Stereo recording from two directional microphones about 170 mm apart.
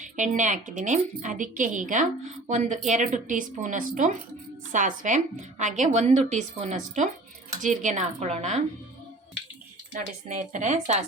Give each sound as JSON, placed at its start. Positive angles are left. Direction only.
{"t": 0.0, "sound": "a woman's voice", "side_deg": -45}
{"t": 9.9, "sound": "a woman's voice", "side_deg": -45}